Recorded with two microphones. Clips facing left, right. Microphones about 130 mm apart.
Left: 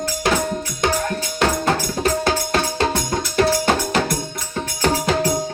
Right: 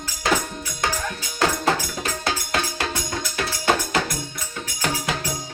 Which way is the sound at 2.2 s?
30° left (ahead or behind).